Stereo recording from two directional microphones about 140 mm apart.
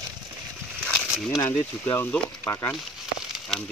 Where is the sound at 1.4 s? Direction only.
15° left (ahead or behind).